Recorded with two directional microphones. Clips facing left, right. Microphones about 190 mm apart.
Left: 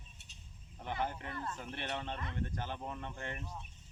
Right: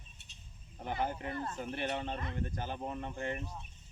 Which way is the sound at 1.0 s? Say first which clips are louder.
Right 3 dB; 15° right (ahead or behind).